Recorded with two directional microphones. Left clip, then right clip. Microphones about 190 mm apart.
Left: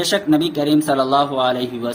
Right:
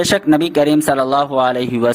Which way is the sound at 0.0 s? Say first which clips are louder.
Right 3 dB; 55° right (ahead or behind).